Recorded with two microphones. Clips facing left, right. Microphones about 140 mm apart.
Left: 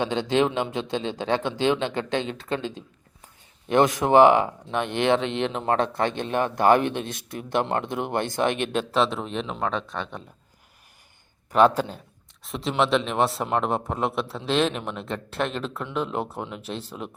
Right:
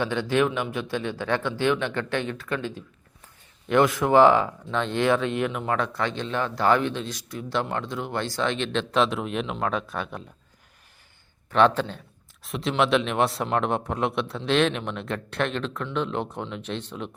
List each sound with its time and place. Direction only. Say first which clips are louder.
0.0 s a man's voice: left 1 dB; 20° left (ahead or behind)
3.9 s a man's voice: left 2 dB; 20° left (ahead or behind)
5.9 s a man's voice: left 3 dB; 55° left (ahead or behind)
8.5 s speech: even; 10° left (ahead or behind)
11.5 s a man's voice: left 1 dB; 10° left (ahead or behind)
12.4 s speech: even; centre (ahead or behind)